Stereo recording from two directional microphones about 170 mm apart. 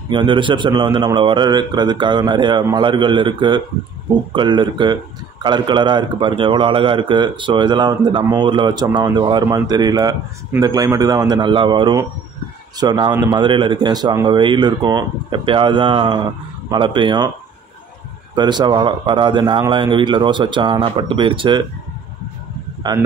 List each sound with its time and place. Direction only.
0.1 s a man's voice: 30° right (ahead or behind)
18.3 s a man's voice: 25° right (ahead or behind)
22.8 s a man's voice: 25° right (ahead or behind)